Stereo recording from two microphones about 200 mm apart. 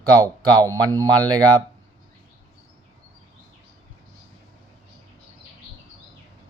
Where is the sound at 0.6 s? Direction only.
15° right (ahead or behind).